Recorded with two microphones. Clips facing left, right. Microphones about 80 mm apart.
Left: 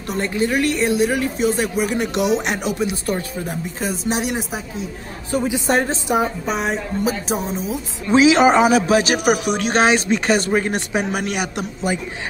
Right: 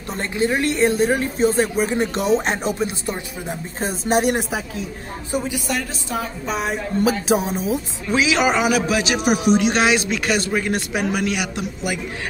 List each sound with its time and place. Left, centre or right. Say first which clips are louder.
0.4 s speech: right 1 dB; right
4.0 s speech: right 6 dB; right
5.5 s a man's voice: left 6 dB; left
6.0 s a woman's voice: left 7 dB; left
6.4 s speech: left 2 dB; centre
8.1 s a man's voice: left 6 dB; left